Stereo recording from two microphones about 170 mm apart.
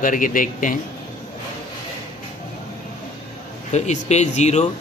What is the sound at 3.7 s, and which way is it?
Speech, 40° left (ahead or behind).